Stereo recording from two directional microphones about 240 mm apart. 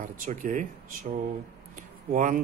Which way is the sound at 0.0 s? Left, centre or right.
Right.